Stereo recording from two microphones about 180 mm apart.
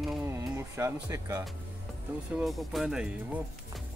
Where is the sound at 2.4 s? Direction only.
Centre (ahead or behind).